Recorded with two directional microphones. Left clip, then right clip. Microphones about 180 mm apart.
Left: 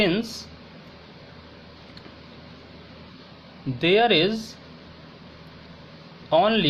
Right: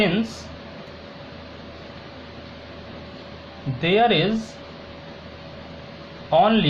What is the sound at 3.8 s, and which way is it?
Speech, 55° left (ahead or behind).